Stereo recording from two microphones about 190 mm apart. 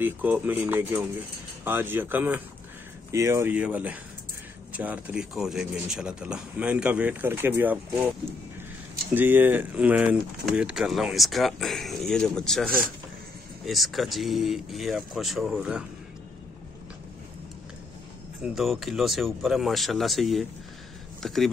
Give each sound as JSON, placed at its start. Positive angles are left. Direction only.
{"t": 0.0, "sound": "speech", "side_deg": -10}
{"t": 18.4, "sound": "speech", "side_deg": 0}